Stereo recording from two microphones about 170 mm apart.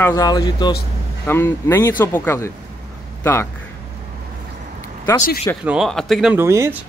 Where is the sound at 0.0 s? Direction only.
20° left (ahead or behind).